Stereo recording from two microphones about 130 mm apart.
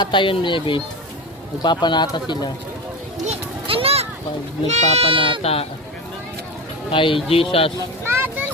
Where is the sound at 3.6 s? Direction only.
45° right (ahead or behind).